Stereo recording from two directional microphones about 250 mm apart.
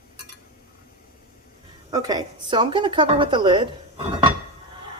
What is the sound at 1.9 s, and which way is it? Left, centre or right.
A woman's voice, centre.